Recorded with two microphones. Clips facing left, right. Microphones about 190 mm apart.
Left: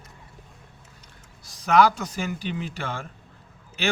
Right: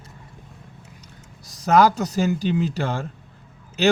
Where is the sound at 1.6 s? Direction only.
40° right (ahead or behind).